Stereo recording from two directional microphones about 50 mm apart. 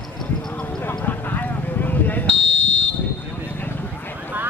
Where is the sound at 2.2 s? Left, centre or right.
Left.